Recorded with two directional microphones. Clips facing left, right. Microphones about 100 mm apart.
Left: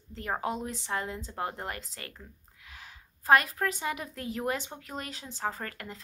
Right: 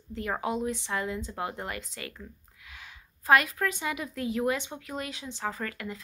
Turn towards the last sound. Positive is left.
turn(degrees=40)  # may be behind; listen again after turning